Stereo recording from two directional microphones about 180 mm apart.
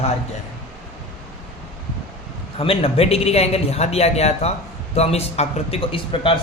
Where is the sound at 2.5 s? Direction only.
30° left (ahead or behind).